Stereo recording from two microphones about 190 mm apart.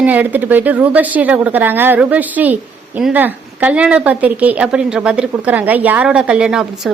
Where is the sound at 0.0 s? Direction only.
10° right (ahead or behind).